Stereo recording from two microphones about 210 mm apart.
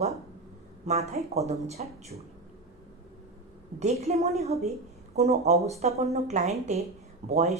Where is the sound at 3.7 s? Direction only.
30° right (ahead or behind).